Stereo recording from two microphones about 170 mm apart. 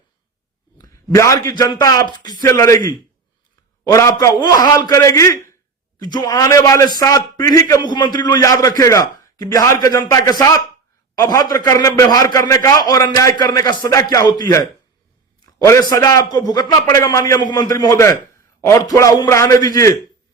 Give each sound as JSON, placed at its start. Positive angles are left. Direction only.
{"t": 0.8, "sound": "a man's voice", "side_deg": 15}
{"t": 3.9, "sound": "a man's voice", "side_deg": 15}